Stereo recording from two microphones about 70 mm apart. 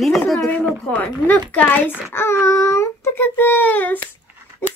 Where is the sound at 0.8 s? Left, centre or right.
Left.